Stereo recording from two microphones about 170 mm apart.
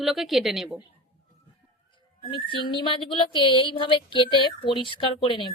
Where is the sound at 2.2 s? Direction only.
30° left (ahead or behind).